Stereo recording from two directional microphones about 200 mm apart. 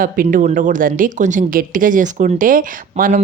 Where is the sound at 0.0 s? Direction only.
45° right (ahead or behind).